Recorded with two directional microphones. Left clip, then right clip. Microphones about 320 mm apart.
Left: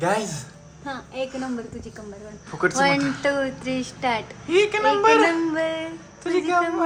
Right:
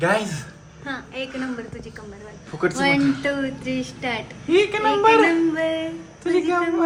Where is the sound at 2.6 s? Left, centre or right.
Centre.